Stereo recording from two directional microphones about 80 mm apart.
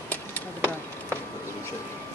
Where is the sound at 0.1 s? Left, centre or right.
Left.